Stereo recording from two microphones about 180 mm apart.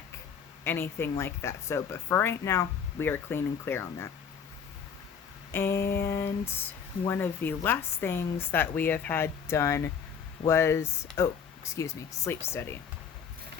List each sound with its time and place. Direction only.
0.6 s speech: 15° left (ahead or behind)
5.5 s speech: 15° left (ahead or behind)